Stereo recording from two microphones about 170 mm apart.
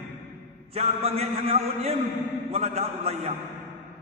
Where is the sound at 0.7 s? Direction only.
40° right (ahead or behind).